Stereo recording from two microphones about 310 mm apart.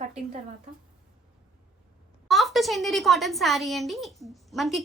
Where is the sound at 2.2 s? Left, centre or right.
Centre.